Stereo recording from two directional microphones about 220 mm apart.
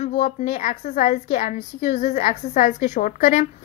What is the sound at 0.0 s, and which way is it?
A woman's voice, 30° left (ahead or behind).